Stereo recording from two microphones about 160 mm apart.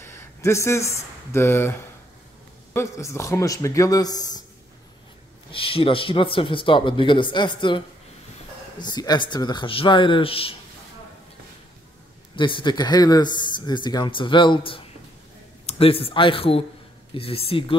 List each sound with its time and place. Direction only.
0.0 s speech: 15° left (ahead or behind)
5.5 s speech: 35° left (ahead or behind)
12.4 s speech: 30° left (ahead or behind)